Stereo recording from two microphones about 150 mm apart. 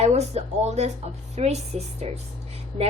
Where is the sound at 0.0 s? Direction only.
45° right (ahead or behind).